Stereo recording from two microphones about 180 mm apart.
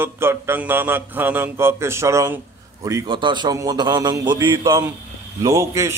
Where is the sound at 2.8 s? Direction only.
20° right (ahead or behind).